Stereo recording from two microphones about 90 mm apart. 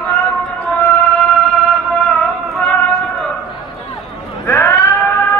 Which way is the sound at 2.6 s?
5° left (ahead or behind).